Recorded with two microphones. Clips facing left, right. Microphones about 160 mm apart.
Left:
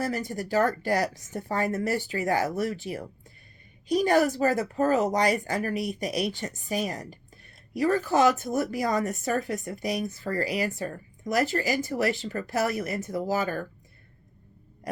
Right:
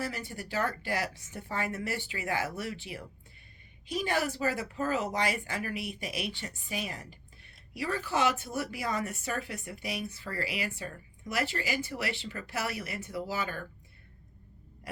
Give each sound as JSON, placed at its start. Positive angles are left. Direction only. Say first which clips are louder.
{"t": 0.0, "sound": "speech", "louder": "left 7 dB", "side_deg": 40}